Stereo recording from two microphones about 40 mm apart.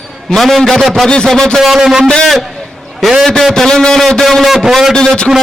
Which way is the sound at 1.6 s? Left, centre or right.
Centre.